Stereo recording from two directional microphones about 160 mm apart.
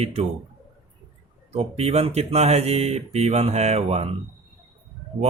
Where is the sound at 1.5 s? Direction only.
40° right (ahead or behind).